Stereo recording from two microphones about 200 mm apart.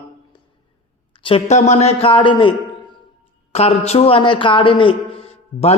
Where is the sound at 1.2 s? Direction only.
30° left (ahead or behind).